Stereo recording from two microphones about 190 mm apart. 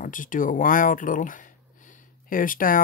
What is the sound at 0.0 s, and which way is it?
Speech, 45° left (ahead or behind).